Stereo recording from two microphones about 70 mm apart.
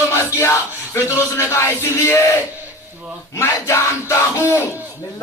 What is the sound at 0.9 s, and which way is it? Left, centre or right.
Music, left.